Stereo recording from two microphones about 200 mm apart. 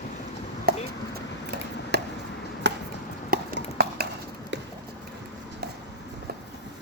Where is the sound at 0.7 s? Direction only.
50° right (ahead or behind).